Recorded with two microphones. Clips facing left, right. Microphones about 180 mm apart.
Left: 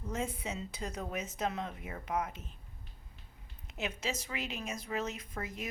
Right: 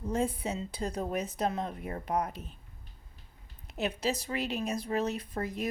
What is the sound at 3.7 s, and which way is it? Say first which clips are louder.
A woman's voice: right 6 dB; 35° right (ahead or behind).